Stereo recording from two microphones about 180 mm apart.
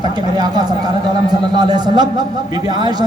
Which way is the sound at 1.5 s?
20° right (ahead or behind).